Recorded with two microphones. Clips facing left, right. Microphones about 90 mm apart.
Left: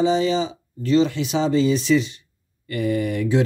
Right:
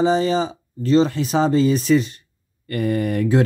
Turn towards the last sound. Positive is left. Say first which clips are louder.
# right 2 dB
turn(degrees=-45)  # may be behind; listen again after turning